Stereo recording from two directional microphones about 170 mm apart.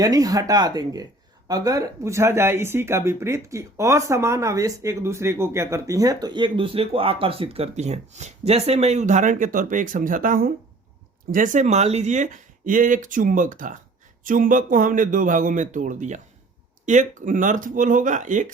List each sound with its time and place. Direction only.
0.0 s speech: 20° right (ahead or behind); by 18.5 s 50° right (ahead or behind)